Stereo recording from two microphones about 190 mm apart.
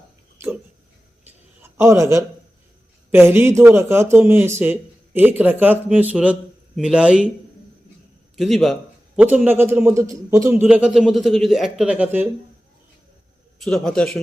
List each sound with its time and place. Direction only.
1.6 s a man's voice: 15° right (ahead or behind)
8.4 s a man's voice: centre (ahead or behind)
13.7 s a man's voice: 5° left (ahead or behind)